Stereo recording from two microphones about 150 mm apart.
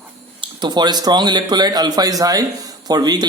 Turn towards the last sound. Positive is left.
turn(degrees=-25)  # may be behind; listen again after turning